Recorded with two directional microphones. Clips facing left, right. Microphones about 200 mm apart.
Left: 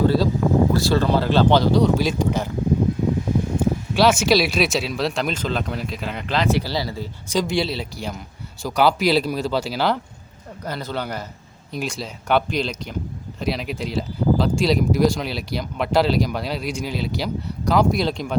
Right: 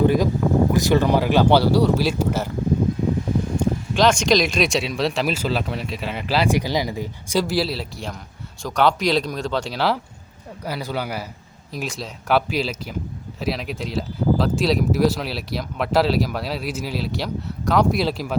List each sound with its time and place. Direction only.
0.0 s speech: 15° right (ahead or behind)
3.6 s speech: 5° left (ahead or behind)